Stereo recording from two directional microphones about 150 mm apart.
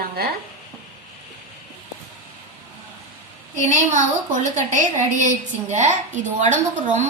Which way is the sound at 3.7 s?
55° right (ahead or behind).